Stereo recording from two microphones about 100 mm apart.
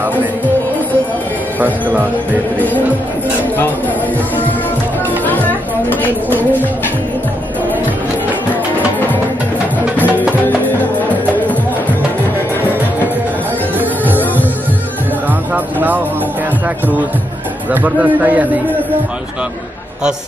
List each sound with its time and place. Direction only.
5.9 s a sound: 20° left (ahead or behind)
9.9 s music: 15° right (ahead or behind)
10.6 s music: 15° left (ahead or behind)
13.7 s music: 20° right (ahead or behind)
15.5 s a man's voice: 15° right (ahead or behind)
17.6 s a man's voice: 15° right (ahead or behind)